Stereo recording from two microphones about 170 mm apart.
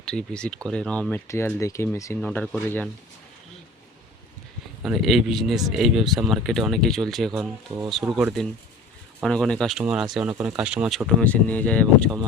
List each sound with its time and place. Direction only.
0.0 s speech: 5° left (ahead or behind)
4.8 s speech: centre (ahead or behind)
7.7 s speech: 25° right (ahead or behind)
8.1 s speech: centre (ahead or behind)
11.2 s speech: 10° left (ahead or behind)